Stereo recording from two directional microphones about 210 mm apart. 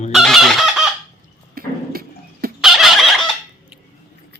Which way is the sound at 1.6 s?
45° right (ahead or behind).